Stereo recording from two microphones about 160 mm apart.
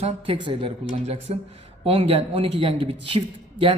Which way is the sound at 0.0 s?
35° right (ahead or behind).